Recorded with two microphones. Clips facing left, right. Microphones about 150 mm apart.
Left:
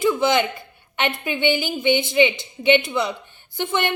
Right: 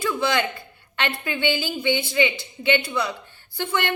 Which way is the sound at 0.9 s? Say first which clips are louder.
Left 3 dB; 20° left (ahead or behind).